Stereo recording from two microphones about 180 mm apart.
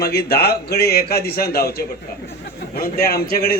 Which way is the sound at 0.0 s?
60° left (ahead or behind).